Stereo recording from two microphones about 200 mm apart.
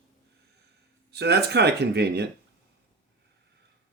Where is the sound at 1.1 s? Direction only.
55° right (ahead or behind).